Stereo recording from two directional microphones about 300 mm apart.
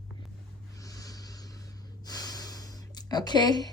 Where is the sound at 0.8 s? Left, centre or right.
Centre.